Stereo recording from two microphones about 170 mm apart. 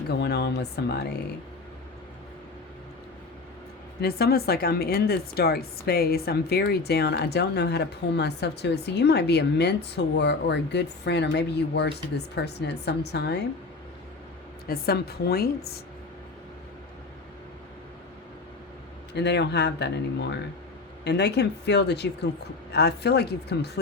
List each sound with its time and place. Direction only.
0.1 s a woman's voice: 75° left (ahead or behind)
4.0 s a woman's voice: 65° left (ahead or behind)
14.7 s a woman's voice: 65° left (ahead or behind)
19.1 s a woman's voice: 90° left